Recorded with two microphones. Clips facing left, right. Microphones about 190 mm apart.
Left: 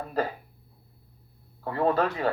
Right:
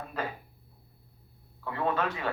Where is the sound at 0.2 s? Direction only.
35° left (ahead or behind).